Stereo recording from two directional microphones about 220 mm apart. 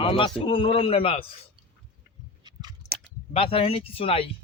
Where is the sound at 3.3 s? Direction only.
25° left (ahead or behind).